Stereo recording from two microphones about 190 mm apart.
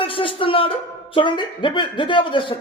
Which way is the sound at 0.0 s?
30° left (ahead or behind).